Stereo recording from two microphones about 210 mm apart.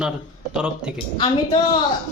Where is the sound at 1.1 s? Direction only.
20° left (ahead or behind).